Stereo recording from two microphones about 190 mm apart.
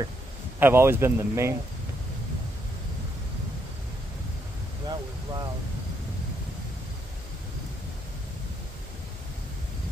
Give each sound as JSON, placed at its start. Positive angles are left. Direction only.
{"t": 0.6, "sound": "speech", "side_deg": -10}
{"t": 4.8, "sound": "vehicle", "side_deg": -20}